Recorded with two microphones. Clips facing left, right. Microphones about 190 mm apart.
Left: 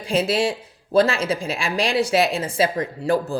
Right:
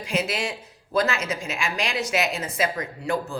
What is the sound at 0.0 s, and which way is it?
Speech, 30° left (ahead or behind).